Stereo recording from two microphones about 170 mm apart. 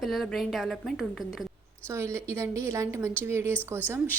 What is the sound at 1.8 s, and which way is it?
A woman's voice, 15° right (ahead or behind).